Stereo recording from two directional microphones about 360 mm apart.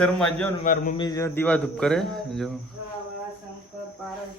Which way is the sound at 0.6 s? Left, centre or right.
Left.